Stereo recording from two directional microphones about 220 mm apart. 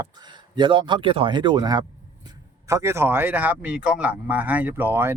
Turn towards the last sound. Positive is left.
turn(degrees=-10)  # may be behind; listen again after turning